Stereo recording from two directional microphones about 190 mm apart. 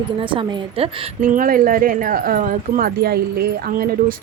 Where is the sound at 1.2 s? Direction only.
45° right (ahead or behind).